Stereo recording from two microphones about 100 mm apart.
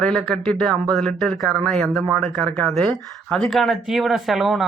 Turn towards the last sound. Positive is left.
turn(degrees=0)  # may be behind; listen again after turning